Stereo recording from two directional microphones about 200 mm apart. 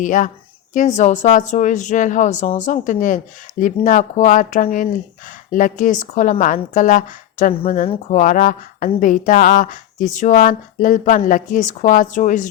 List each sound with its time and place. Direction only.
0.0 s a woman's voice: 40° left (ahead or behind)